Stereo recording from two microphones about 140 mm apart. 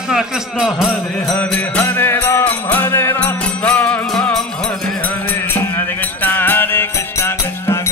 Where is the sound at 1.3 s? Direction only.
10° left (ahead or behind).